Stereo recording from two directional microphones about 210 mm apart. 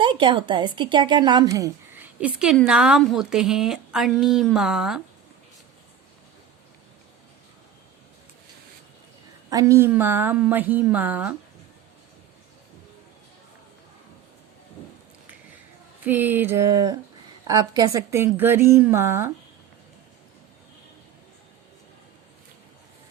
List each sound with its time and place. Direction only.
0.0 s a woman's voice: 25° right (ahead or behind); by 5.0 s 5° right (ahead or behind)
9.5 s a woman's voice: 15° right (ahead or behind)
16.0 s a woman's voice: 10° right (ahead or behind)